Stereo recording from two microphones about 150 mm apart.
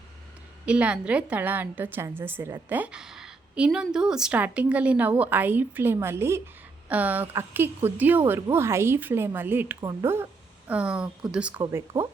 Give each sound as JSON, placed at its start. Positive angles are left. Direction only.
{"t": 0.6, "sound": "a woman's voice", "side_deg": -10}
{"t": 10.7, "sound": "a woman's voice", "side_deg": -10}